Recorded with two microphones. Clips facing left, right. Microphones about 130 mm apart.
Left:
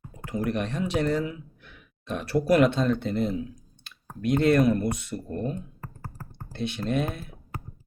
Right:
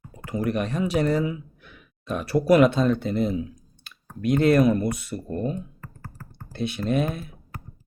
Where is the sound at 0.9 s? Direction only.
5° right (ahead or behind).